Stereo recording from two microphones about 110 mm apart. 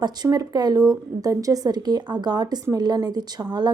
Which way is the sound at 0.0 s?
35° right (ahead or behind).